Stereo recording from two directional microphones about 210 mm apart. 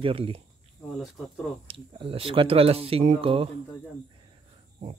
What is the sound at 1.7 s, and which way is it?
Speech, 25° right (ahead or behind).